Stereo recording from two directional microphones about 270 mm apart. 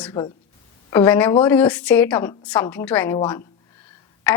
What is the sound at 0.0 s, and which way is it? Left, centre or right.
A woman's voice, centre.